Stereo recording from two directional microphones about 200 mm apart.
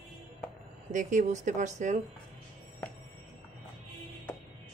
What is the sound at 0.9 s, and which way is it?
Speech, 40° right (ahead or behind).